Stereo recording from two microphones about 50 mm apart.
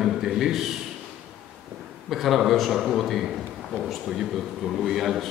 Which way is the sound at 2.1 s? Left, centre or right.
Centre.